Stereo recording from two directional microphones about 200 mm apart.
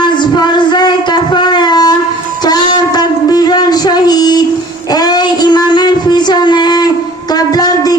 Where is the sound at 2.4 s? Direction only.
20° left (ahead or behind).